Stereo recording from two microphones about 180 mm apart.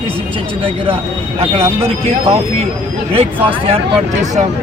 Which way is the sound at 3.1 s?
30° right (ahead or behind).